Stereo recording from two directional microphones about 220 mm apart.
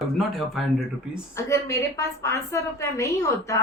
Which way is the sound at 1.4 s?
15° left (ahead or behind).